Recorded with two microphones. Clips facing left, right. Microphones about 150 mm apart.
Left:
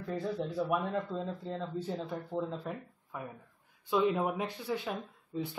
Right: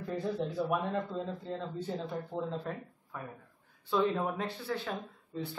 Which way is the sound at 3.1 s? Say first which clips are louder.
Left 1 dB; 15° left (ahead or behind).